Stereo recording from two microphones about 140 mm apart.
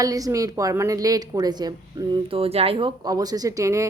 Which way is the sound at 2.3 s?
45° right (ahead or behind).